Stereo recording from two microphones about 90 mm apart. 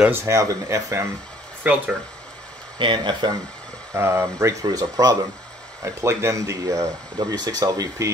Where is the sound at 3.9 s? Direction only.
30° right (ahead or behind).